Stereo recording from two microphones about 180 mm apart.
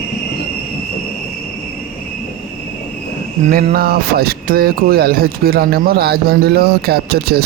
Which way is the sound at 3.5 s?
55° right (ahead or behind).